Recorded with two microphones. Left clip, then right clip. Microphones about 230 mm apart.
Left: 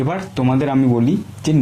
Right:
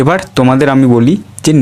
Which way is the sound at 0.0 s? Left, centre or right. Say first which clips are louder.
Right 11 dB; right.